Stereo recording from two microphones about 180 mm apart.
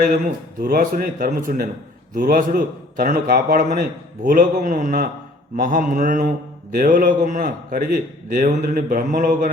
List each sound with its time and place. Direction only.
0.6 s a man's voice: 50° right (ahead or behind)